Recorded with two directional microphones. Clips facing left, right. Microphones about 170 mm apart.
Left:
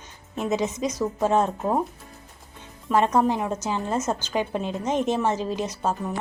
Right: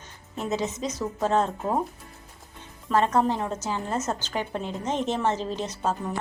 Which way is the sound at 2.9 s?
15° left (ahead or behind).